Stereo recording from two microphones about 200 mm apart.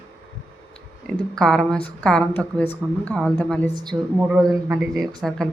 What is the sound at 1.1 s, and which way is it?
Speech, 5° left (ahead or behind).